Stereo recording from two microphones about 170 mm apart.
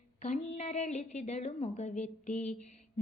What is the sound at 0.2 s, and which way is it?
A woman's voice, 45° left (ahead or behind).